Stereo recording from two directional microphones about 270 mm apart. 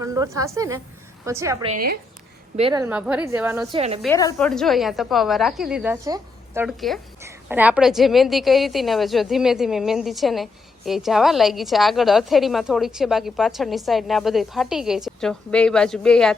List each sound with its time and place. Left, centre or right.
0.0 s a woman's voice: centre
1.6 s speech: right
2.6 s a woman's voice: centre
2.8 s a woman's voice: centre
3.7 s a woman's voice: right
4.0 s a woman's voice: centre